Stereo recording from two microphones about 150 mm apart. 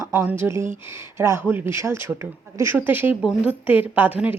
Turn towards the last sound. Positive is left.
turn(degrees=-10)  # may be behind; listen again after turning